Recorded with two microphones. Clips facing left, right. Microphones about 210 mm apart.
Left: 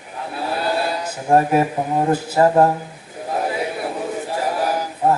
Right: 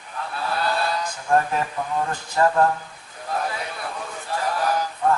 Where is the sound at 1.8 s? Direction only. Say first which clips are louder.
Left 7 dB; 25° left (ahead or behind).